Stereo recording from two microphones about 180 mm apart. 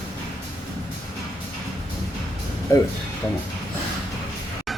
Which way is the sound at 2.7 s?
20° left (ahead or behind).